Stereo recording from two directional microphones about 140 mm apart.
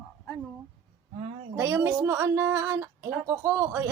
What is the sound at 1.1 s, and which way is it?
Speech, 45° right (ahead or behind).